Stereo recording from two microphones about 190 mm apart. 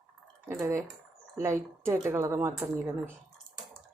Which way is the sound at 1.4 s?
10° right (ahead or behind).